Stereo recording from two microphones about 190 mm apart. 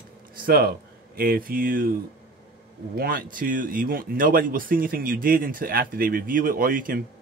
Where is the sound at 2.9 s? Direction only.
50° right (ahead or behind).